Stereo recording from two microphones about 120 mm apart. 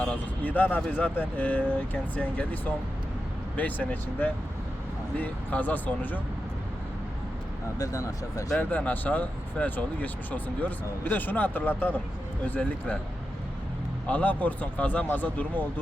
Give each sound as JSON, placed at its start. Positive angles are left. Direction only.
{"t": 0.0, "sound": "speech", "side_deg": 10}
{"t": 7.8, "sound": "speech", "side_deg": 25}
{"t": 8.5, "sound": "speech", "side_deg": 15}
{"t": 14.1, "sound": "speech", "side_deg": 15}